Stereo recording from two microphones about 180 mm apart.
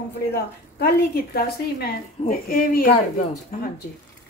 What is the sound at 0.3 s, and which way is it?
A woman's voice, 60° left (ahead or behind).